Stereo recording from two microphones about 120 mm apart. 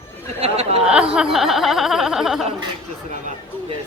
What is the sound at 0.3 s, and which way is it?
Chatter, 60° right (ahead or behind).